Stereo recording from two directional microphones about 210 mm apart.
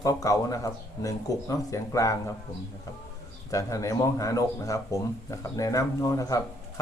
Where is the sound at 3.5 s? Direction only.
15° left (ahead or behind).